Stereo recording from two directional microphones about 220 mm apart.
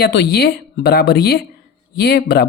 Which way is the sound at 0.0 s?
45° left (ahead or behind).